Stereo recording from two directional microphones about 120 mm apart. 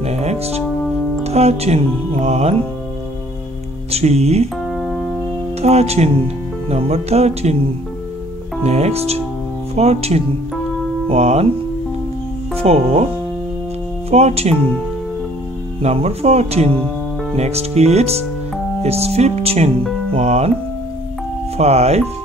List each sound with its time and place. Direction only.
0.0 s music: 65° right (ahead or behind)
1.2 s speech: 60° right (ahead or behind)
3.9 s speech: 60° right (ahead or behind)
4.6 s music: centre (ahead or behind)
5.6 s speech: 60° right (ahead or behind)
8.6 s speech: 65° right (ahead or behind)
12.5 s speech: 60° right (ahead or behind)
14.1 s speech: 60° right (ahead or behind)
15.8 s speech: 60° right (ahead or behind)
21.5 s speech: 65° right (ahead or behind)